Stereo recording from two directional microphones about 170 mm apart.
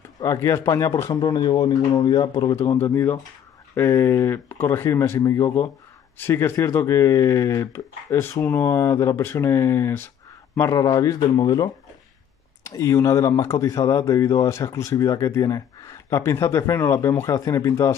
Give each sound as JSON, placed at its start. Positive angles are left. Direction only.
{"t": 0.2, "sound": "speech", "side_deg": 20}